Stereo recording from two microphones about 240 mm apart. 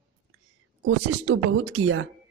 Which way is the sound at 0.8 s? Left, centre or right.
Right.